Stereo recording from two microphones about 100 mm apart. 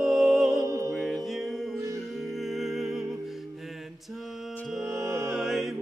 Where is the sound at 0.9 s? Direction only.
Centre (ahead or behind).